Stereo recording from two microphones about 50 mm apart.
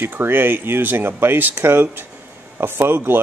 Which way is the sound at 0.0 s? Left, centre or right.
Right.